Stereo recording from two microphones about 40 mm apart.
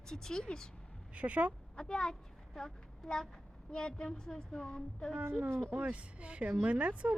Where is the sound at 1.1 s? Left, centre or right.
Right.